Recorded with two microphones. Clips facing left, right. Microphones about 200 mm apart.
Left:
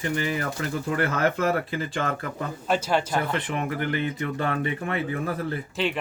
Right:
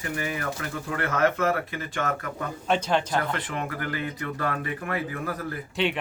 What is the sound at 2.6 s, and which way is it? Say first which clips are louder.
Speech: even; 5° left (ahead or behind).